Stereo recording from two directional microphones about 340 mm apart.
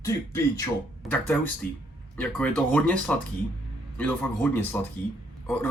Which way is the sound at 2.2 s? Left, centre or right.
Centre.